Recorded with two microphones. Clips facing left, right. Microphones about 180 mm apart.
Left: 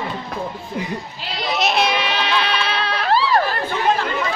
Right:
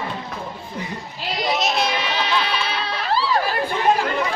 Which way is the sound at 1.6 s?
65° left (ahead or behind).